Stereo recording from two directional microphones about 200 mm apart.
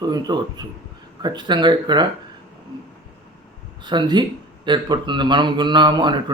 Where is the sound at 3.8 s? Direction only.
20° right (ahead or behind).